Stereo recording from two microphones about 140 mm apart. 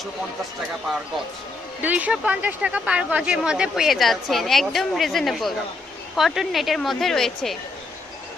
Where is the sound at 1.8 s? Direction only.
10° right (ahead or behind).